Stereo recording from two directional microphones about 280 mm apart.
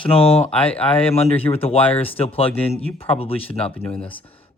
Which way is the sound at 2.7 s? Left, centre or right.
Left.